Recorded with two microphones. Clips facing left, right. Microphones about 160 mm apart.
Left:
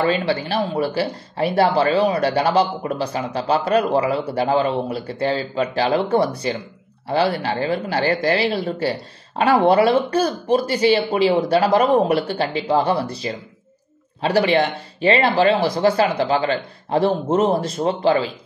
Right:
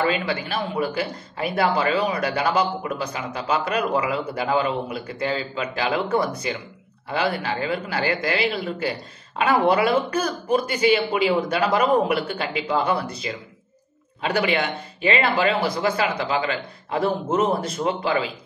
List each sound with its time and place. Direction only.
0.0 s speech: 35° left (ahead or behind)